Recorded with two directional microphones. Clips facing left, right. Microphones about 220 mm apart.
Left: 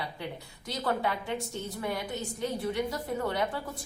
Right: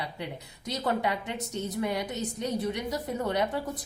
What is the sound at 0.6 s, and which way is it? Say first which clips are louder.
A woman's voice: right 2 dB; 20° right (ahead or behind).